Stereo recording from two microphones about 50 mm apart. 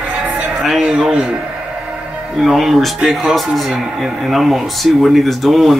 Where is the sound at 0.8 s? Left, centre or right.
Centre.